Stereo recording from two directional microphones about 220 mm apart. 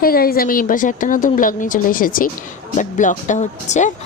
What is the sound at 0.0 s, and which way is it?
Speech, 40° left (ahead or behind).